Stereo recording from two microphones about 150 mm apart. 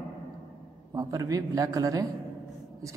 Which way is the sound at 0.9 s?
20° right (ahead or behind).